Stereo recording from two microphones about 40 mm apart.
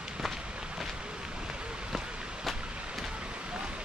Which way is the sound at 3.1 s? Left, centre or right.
Right.